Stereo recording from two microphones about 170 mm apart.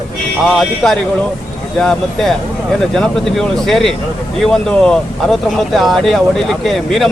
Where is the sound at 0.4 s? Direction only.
Centre (ahead or behind).